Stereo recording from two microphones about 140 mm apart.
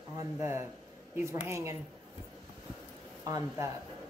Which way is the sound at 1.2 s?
20° right (ahead or behind).